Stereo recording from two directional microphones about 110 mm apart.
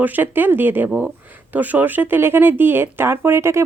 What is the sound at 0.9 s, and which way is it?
A woman's voice, 5° right (ahead or behind).